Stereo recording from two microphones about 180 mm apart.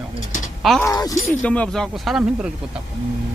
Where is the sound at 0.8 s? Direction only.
20° left (ahead or behind).